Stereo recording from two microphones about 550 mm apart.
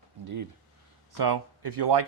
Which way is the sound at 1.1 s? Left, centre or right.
Right.